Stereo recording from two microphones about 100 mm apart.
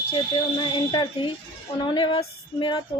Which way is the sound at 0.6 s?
45° left (ahead or behind).